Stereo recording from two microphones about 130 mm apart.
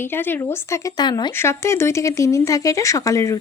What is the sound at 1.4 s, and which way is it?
Speech, 20° left (ahead or behind).